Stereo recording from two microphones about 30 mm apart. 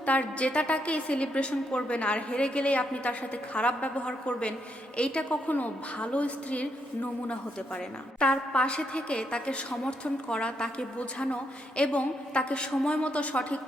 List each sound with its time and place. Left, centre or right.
0.0 s a woman's voice: left
4.0 s a woman's voice: left
5.5 s a woman's voice: left
6.0 s a woman's voice: left
8.2 s a woman's voice: left
10.9 s a woman's voice: left